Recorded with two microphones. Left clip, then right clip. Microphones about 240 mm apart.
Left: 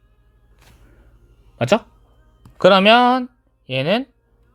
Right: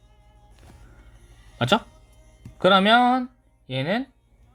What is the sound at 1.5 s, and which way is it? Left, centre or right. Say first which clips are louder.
Speech: left 4 dB; left.